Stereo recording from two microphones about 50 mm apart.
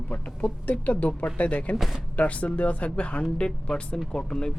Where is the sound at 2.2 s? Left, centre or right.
Left.